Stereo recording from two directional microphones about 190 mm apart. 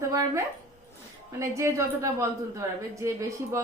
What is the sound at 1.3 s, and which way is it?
A woman's voice, 15° right (ahead or behind).